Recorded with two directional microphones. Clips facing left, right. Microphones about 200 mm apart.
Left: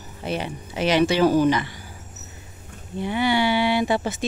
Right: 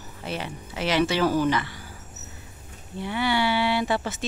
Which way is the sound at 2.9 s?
15° left (ahead or behind).